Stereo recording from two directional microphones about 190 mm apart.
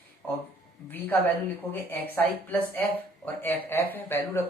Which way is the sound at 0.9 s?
10° left (ahead or behind).